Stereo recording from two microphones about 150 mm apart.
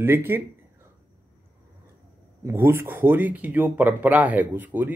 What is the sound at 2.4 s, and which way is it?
Speech, 15° right (ahead or behind).